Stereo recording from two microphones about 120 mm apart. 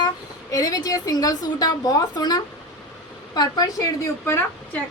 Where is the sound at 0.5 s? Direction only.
30° left (ahead or behind).